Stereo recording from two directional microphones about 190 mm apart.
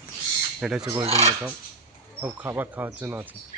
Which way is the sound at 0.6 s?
5° right (ahead or behind).